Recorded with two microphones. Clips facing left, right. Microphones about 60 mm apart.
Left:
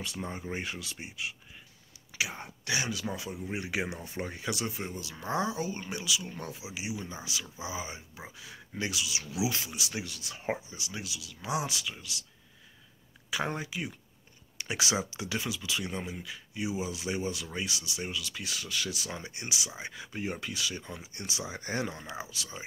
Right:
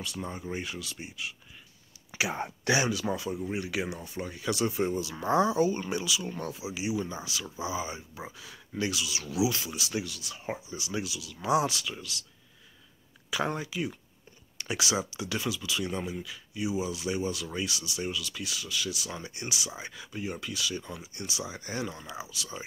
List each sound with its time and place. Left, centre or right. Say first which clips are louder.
0.2 s speech: right 1 dB; left
2.0 s whispering: right 3 dB; right
2.9 s speech: right 5 dB; centre
3.4 s speech: left 2 dB; centre
4.5 s speech: right 10 dB; centre
5.3 s speech: right 7 dB; centre
8.4 s speech: right 3 dB; centre
10.0 s speech: left 2 dB; left
10.7 s speech: right 6 dB; centre
13.3 s speech: right 2 dB; centre
14.8 s speech: right 1 dB; left
18.5 s speech: even; left
19.1 s speech: right 1 dB; left
20.2 s speech: right 1 dB; left